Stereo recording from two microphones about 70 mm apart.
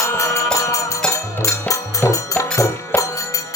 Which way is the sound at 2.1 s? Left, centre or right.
Left.